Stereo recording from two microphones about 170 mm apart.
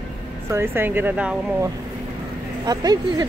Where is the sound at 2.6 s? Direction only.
25° right (ahead or behind).